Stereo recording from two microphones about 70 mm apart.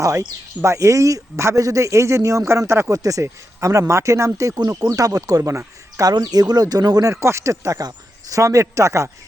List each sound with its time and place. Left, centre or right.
0.6 s speech: right
2.9 s speech: right
4.4 s speech: right
7.1 s speech: right